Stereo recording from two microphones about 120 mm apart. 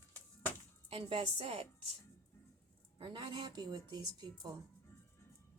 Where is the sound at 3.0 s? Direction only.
45° right (ahead or behind).